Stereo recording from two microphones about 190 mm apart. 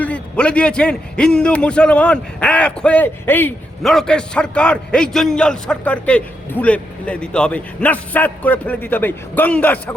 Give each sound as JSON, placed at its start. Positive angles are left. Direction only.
{"t": 0.0, "sound": "a man's voice", "side_deg": 5}